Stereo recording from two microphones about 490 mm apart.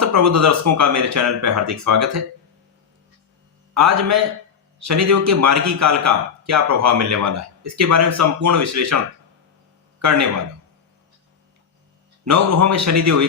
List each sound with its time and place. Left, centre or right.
0.0 s a man's voice: right
3.8 s a man's voice: right
10.0 s a man's voice: right
12.2 s a man's voice: right